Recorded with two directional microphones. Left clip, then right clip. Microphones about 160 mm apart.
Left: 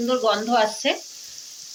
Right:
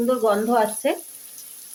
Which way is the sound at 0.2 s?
75° right (ahead or behind).